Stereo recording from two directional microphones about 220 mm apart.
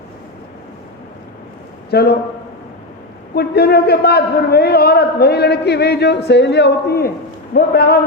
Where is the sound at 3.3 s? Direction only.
45° left (ahead or behind).